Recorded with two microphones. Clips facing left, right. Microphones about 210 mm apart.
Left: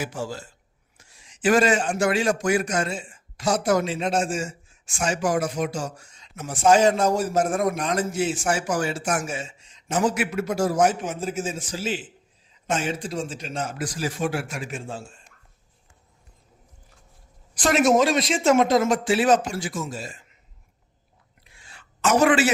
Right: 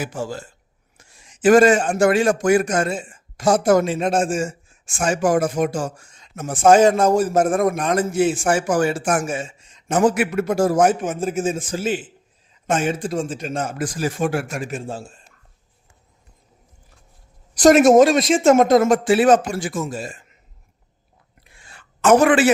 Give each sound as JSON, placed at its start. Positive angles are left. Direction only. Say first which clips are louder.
{"t": 0.0, "sound": "a man's voice", "louder": "right 3 dB", "side_deg": -50}
{"t": 17.5, "sound": "a man's voice", "louder": "right 8 dB", "side_deg": -40}
{"t": 21.7, "sound": "a sound", "louder": "right 7 dB", "side_deg": -55}